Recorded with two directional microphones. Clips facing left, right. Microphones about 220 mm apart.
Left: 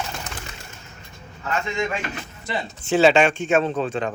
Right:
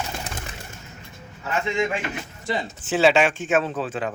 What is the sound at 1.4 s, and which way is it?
Speech, 20° right (ahead or behind).